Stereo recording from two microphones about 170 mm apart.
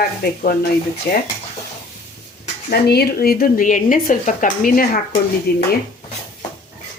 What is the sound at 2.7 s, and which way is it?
Speech, 70° left (ahead or behind).